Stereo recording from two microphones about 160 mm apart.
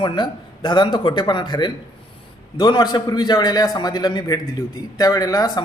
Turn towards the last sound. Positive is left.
turn(degrees=25)  # may be behind; listen again after turning